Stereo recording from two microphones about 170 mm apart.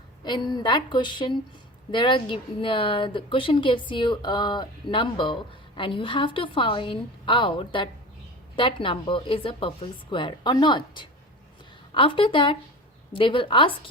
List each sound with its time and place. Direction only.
0.3 s a woman's voice: 25° left (ahead or behind)